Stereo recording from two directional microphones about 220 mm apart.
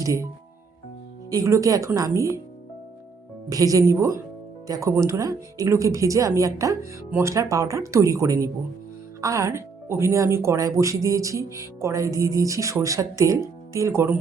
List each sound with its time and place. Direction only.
0.0 s speech: 15° right (ahead or behind)
1.3 s speech: 15° right (ahead or behind)
3.5 s speech: 15° right (ahead or behind)